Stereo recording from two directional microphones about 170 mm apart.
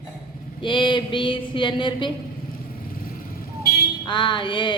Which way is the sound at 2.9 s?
55° left (ahead or behind).